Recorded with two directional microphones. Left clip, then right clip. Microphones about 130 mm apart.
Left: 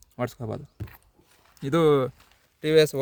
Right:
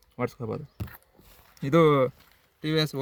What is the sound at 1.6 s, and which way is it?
Speech, 25° left (ahead or behind).